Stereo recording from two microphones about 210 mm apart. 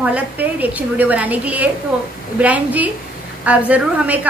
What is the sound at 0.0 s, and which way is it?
A woman's voice, 5° right (ahead or behind).